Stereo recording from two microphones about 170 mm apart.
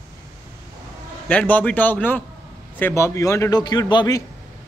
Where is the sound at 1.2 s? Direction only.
10° left (ahead or behind).